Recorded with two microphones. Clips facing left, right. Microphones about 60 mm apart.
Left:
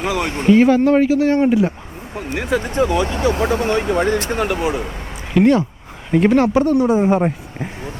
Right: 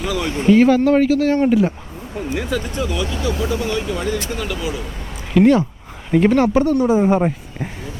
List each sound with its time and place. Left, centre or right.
0.0 s a sound: left
0.4 s speech: centre
2.5 s speech: left
5.3 s speech: centre